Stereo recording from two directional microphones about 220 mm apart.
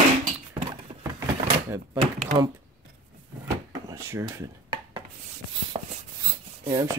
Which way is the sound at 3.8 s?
15° right (ahead or behind).